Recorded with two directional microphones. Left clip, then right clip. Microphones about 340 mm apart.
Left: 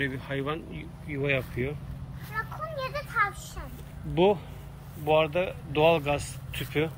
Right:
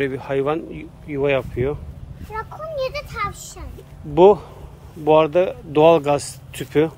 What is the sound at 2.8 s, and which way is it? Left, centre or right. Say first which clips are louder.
Speech: right 3 dB; right.